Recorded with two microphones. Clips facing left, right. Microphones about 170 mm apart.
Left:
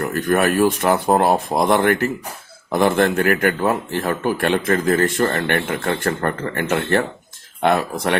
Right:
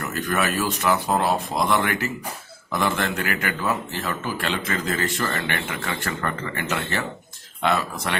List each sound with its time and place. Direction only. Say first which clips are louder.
0.0 s a man's voice: left 7 dB; 50° left (ahead or behind)